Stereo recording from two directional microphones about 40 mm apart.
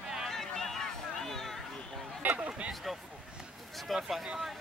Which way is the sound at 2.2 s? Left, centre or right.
Right.